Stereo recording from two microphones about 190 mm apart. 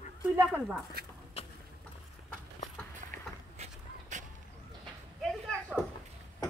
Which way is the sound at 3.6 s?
40° right (ahead or behind).